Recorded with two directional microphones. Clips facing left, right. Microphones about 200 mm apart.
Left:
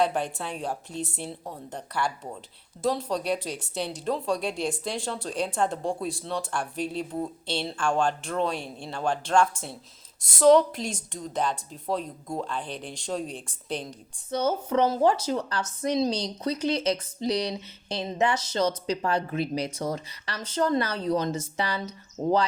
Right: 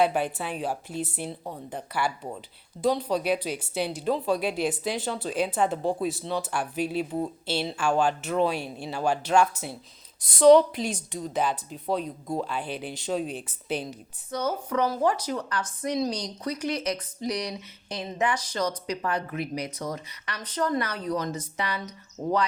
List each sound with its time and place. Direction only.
0.0 s speech: 5° right (ahead or behind)
14.3 s speech: 25° left (ahead or behind)